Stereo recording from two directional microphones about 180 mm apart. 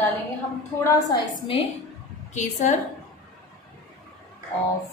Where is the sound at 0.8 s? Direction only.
20° left (ahead or behind).